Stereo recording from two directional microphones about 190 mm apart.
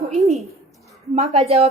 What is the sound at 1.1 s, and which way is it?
Speech, 35° right (ahead or behind).